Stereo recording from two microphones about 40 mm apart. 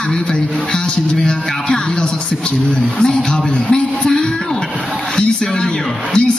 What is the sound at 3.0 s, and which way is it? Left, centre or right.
A man's voice, centre.